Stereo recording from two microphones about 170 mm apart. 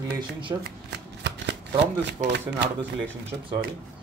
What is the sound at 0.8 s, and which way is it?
Shuffling cards, 90° right.